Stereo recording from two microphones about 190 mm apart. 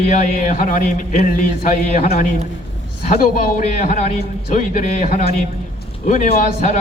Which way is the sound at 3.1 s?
45° left (ahead or behind).